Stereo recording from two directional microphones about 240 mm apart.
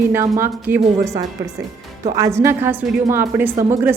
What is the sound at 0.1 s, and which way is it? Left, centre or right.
A woman's voice, centre.